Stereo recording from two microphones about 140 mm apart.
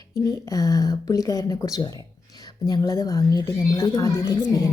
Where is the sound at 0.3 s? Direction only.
25° left (ahead or behind).